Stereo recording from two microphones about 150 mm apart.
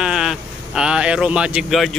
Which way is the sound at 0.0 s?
5° right (ahead or behind).